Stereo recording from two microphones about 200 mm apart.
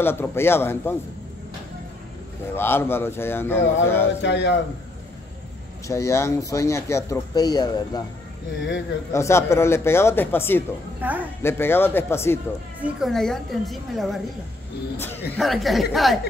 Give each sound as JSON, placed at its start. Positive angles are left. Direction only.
{"t": 0.0, "sound": "speech", "side_deg": 10}
{"t": 2.5, "sound": "speech", "side_deg": 10}
{"t": 4.2, "sound": "a man's voice", "side_deg": 60}
{"t": 5.9, "sound": "speech", "side_deg": 15}
{"t": 9.1, "sound": "speech", "side_deg": 15}
{"t": 11.0, "sound": "a woman's voice", "side_deg": -10}
{"t": 11.4, "sound": "speech", "side_deg": 10}
{"t": 12.8, "sound": "a woman's voice", "side_deg": 0}